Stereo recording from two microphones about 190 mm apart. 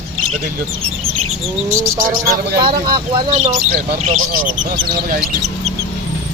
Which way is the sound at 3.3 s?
40° right (ahead or behind).